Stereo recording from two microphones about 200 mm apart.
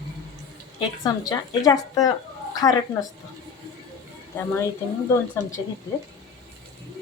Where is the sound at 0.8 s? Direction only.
20° left (ahead or behind).